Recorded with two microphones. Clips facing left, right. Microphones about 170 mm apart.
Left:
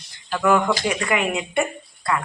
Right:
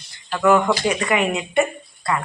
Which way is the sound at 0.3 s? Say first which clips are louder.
Right 2 dB; 5° right (ahead or behind).